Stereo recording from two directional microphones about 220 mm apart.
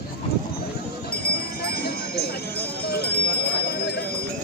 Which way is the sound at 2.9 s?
45° left (ahead or behind).